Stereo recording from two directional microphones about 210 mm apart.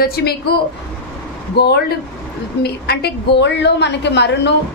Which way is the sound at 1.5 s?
50° left (ahead or behind).